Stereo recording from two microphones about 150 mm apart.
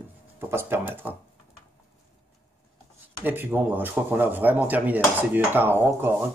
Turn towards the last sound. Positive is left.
turn(degrees=-15)  # may be behind; listen again after turning